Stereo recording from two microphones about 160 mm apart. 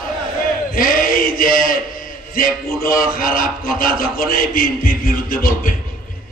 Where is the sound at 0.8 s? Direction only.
60° left (ahead or behind).